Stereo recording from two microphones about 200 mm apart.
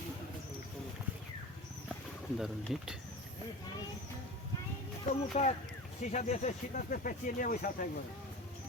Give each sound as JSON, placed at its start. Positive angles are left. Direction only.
{"t": 2.4, "sound": "speech", "side_deg": 0}
{"t": 5.0, "sound": "speech", "side_deg": 35}